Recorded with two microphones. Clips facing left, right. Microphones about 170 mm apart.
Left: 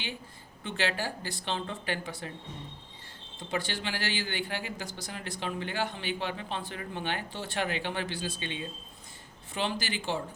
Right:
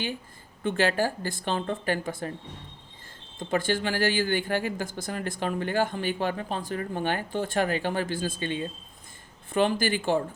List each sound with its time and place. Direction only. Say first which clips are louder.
0.6 s speech: right 7 dB; 50° right (ahead or behind)
3.3 s speech: right 8 dB; 50° right (ahead or behind)